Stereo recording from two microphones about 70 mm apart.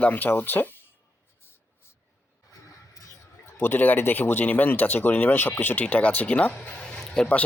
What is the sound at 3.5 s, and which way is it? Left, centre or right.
Speech, left.